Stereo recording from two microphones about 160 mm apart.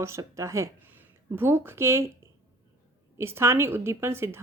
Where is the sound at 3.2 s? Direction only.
15° right (ahead or behind).